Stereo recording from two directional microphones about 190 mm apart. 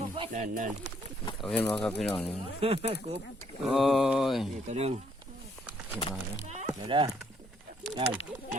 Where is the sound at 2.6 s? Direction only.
30° right (ahead or behind).